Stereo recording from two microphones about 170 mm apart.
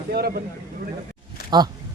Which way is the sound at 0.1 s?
65° right (ahead or behind).